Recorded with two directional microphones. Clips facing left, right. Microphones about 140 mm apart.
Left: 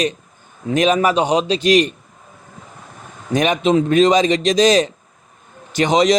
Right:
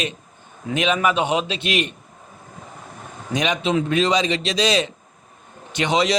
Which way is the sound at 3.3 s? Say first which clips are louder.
Left 6 dB; 50° left (ahead or behind).